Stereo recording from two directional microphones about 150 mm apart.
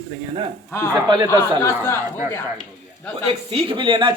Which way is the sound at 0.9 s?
25° right (ahead or behind).